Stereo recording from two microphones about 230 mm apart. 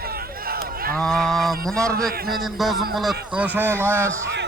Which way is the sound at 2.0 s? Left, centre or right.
Right.